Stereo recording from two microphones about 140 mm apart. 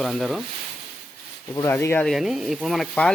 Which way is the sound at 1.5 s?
20° left (ahead or behind).